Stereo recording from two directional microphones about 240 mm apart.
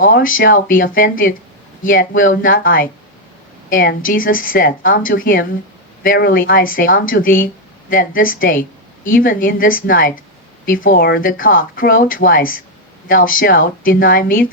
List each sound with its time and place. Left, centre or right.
0.0 s speech: left